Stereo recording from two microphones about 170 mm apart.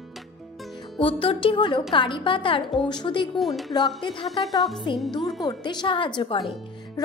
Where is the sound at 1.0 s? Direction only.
30° left (ahead or behind).